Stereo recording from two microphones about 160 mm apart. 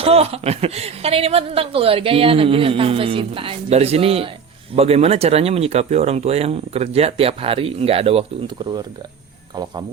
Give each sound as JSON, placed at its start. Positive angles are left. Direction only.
{"t": 0.0, "sound": "a woman's voice", "side_deg": -40}